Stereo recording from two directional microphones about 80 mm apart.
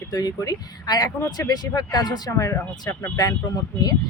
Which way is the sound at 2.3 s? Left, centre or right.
Left.